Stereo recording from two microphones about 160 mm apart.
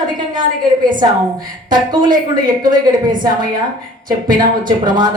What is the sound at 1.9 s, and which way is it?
Speech, 25° right (ahead or behind).